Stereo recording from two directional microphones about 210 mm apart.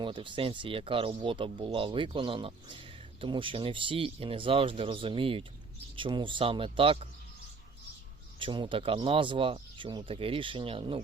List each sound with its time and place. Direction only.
0.0 s speech: 25° right (ahead or behind)
8.4 s speech: 25° right (ahead or behind)